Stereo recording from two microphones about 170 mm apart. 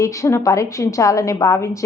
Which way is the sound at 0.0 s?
20° left (ahead or behind).